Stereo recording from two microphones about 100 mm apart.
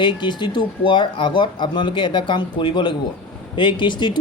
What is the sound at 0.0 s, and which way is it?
Speech, 50° left (ahead or behind).